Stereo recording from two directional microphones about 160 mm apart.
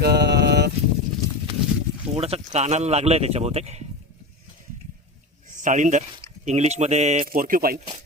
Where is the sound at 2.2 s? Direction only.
40° right (ahead or behind).